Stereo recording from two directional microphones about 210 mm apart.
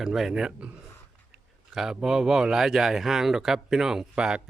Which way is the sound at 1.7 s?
Centre (ahead or behind).